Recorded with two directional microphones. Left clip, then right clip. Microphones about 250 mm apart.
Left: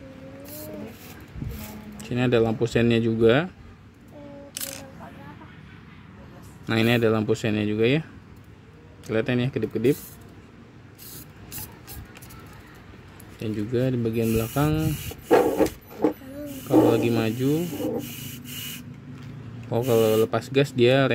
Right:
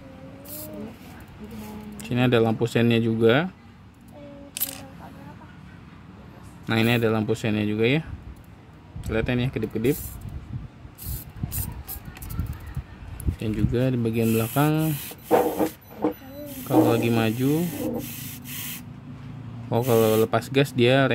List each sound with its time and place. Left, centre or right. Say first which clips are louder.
2.0 s speech: right 1 dB; centre
6.6 s speech: left 1 dB; centre
9.1 s speech: left 1 dB; centre
13.4 s speech: even; centre
15.2 s a sound: left 2 dB; left
16.9 s speech: even; centre
18.2 s sanding: left 1 dB; centre
19.7 s speech: even; centre